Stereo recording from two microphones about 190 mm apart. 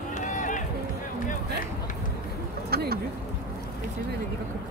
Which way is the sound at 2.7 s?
55° right (ahead or behind).